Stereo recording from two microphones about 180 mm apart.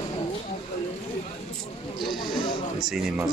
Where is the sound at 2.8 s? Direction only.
Centre (ahead or behind).